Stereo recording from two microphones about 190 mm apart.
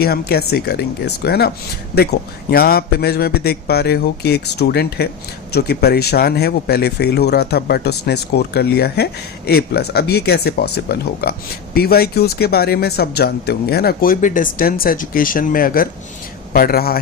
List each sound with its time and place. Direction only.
0.0 s speech: 55° left (ahead or behind)